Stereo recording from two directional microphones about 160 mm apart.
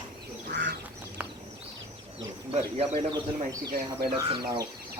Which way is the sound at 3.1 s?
25° right (ahead or behind).